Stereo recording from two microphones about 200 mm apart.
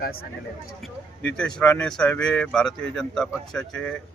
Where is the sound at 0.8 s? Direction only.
5° left (ahead or behind).